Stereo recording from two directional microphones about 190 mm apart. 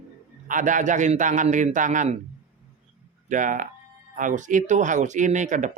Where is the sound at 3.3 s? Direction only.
40° right (ahead or behind).